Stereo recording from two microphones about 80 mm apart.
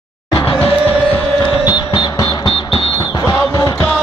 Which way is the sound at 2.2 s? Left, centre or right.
Left.